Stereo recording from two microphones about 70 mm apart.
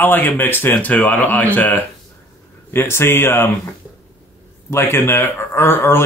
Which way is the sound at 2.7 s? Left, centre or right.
Left.